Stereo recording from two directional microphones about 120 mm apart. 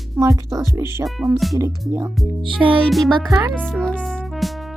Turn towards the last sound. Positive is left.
turn(degrees=5)  # may be behind; listen again after turning